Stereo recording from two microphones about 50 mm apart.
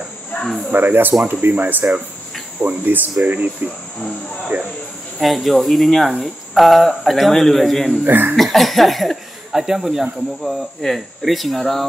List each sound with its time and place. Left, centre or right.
0.4 s cricket: centre
0.7 s speech: right
5.2 s speech: centre
8.0 s speech: right
8.4 s speech: centre